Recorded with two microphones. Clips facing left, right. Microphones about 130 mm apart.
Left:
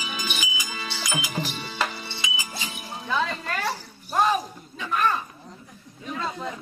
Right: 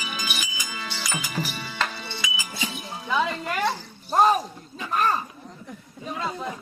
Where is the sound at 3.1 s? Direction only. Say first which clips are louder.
Right 2 dB; 15° right (ahead or behind).